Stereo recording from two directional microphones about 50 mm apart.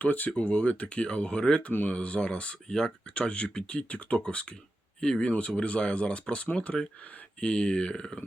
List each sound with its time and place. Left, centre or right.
0.0 s speech: left; by 8.2 s centre